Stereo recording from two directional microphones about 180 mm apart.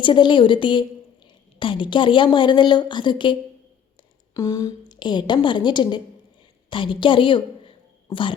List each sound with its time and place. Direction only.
0.0 s a woman's voice: 25° left (ahead or behind)
4.4 s a woman's voice: 20° left (ahead or behind)